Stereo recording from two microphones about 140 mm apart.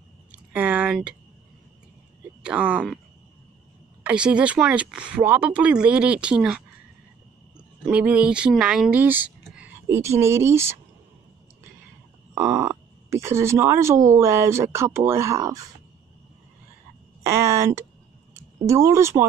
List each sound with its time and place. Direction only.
0.3 s a sound: 10° right (ahead or behind)
2.4 s speech: 10° right (ahead or behind)
4.0 s speech: 10° right (ahead or behind)
7.9 s speech: 10° right (ahead or behind)
12.4 s speech: 20° right (ahead or behind)
17.2 s speech: 20° right (ahead or behind)